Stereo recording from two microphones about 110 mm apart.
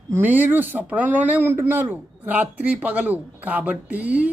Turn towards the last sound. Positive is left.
turn(degrees=-15)  # may be behind; listen again after turning